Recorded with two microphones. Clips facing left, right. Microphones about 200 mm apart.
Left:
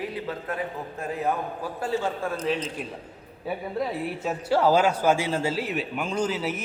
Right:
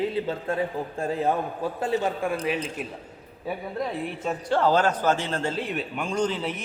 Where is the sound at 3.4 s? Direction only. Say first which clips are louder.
Left 1 dB; 5° left (ahead or behind).